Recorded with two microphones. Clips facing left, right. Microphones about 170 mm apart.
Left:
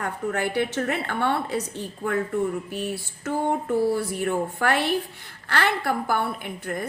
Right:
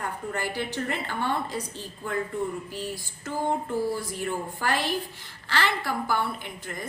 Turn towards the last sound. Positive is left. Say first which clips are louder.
# left 6 dB
turn(degrees=55)  # may be behind; listen again after turning